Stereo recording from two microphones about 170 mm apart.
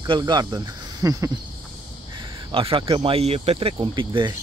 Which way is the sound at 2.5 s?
30° right (ahead or behind).